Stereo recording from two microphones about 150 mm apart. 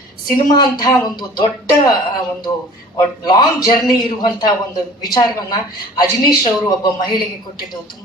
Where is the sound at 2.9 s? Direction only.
25° left (ahead or behind).